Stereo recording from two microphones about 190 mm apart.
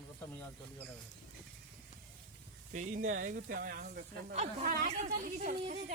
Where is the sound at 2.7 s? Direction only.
40° right (ahead or behind).